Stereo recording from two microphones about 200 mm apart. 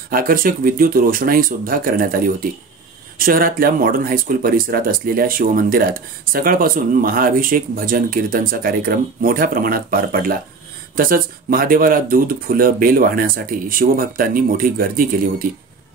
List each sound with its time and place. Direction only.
0.1 s speech: 45° right (ahead or behind)